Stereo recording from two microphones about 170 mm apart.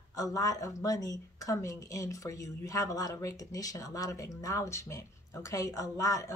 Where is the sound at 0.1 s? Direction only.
20° left (ahead or behind).